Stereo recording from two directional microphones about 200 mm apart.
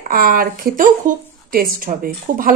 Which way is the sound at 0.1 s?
45° right (ahead or behind).